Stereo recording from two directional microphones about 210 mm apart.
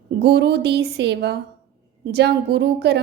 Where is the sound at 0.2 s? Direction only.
50° right (ahead or behind).